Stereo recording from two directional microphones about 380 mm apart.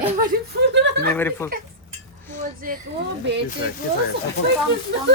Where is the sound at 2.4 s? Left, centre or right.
Right.